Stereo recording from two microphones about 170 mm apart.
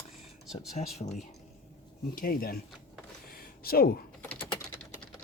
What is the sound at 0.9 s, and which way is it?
Speech, 40° left (ahead or behind).